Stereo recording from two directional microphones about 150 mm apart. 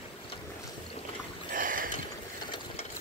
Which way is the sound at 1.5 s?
65° right (ahead or behind).